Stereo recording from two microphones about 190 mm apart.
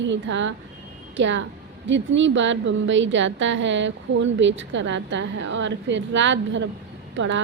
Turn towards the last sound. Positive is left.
turn(degrees=-90)